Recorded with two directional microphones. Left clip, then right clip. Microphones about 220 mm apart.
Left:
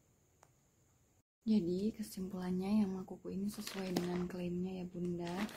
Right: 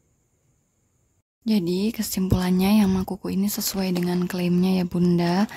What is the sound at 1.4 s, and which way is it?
Speech, 40° right (ahead or behind).